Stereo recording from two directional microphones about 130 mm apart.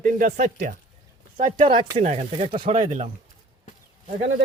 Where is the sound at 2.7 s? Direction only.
75° right (ahead or behind).